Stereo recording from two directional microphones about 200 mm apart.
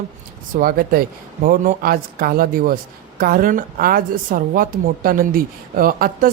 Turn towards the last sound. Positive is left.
turn(degrees=-45)  # may be behind; listen again after turning